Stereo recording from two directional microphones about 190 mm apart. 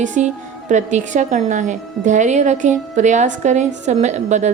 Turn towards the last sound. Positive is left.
turn(degrees=-40)  # may be behind; listen again after turning